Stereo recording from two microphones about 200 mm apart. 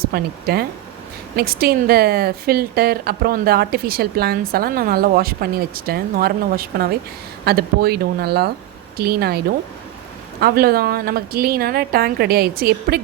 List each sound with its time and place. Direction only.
0.0 s a woman's voice: 50° right (ahead or behind)
10.4 s a woman's voice: 50° right (ahead or behind)